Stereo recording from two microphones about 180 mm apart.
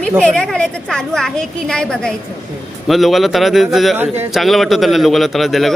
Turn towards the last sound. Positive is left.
turn(degrees=0)  # may be behind; listen again after turning